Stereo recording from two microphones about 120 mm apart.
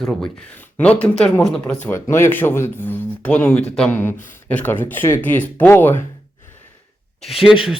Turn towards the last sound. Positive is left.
turn(degrees=0)  # may be behind; listen again after turning